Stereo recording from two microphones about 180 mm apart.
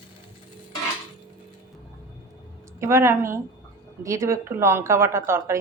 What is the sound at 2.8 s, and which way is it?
Speech, 15° right (ahead or behind).